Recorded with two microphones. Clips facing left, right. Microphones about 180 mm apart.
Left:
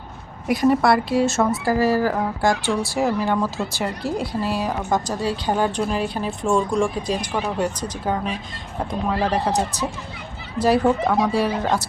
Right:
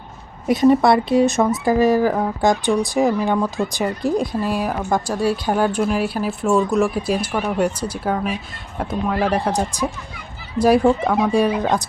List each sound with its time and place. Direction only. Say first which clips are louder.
0.4 s a woman's voice: right 3 dB; 20° right (ahead or behind)